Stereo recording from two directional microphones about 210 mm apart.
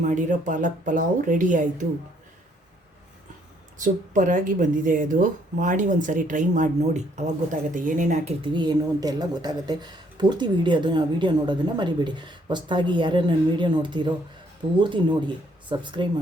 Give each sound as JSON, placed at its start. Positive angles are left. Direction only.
{"t": 0.0, "sound": "speech", "side_deg": -35}
{"t": 3.8, "sound": "speech", "side_deg": -40}